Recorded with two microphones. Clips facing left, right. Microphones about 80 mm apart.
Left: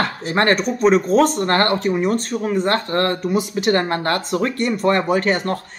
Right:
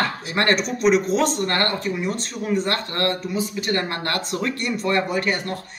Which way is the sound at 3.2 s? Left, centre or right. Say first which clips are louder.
Left 5 dB; left.